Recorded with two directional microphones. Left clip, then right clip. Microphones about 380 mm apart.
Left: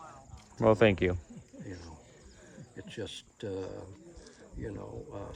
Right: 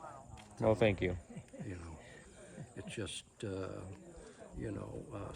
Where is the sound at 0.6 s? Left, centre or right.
Left.